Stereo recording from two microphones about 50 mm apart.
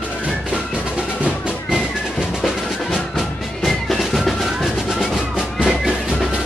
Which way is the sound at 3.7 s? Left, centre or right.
Centre.